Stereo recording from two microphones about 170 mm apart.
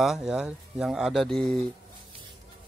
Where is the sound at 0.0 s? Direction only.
Centre (ahead or behind).